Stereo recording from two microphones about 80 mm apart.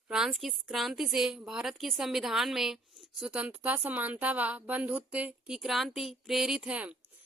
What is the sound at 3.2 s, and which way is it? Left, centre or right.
Speech, centre.